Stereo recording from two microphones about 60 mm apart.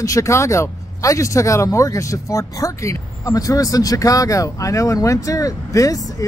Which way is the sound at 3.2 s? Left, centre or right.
Left.